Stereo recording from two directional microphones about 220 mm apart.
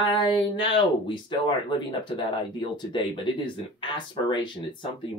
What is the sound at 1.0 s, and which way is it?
Speech, 20° left (ahead or behind).